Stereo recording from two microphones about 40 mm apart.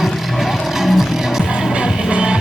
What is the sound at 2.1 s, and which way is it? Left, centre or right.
Music, right.